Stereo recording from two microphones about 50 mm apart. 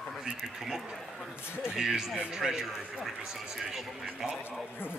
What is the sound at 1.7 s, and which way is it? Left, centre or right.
Speech, centre.